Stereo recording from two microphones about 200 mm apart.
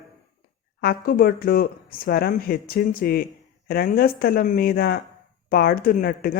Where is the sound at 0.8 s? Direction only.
50° left (ahead or behind).